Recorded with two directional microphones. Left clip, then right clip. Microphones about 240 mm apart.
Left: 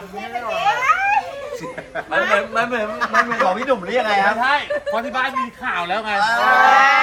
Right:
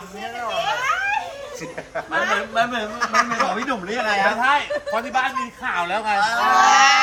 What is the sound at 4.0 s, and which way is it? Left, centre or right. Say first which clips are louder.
Speech: left 2 dB; left.